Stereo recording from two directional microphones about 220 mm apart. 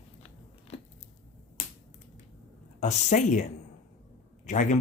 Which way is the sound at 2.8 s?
35° left (ahead or behind).